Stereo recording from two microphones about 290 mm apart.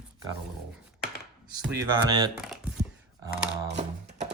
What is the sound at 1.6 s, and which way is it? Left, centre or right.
Speech, centre.